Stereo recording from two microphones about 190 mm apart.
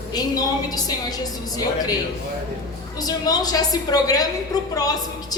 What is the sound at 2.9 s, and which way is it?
A woman's voice, 20° left (ahead or behind).